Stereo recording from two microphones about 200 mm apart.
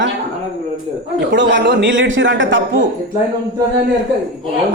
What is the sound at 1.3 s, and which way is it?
A man's voice, 60° right (ahead or behind).